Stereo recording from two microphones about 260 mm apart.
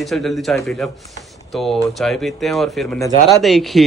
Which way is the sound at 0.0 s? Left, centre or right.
Centre.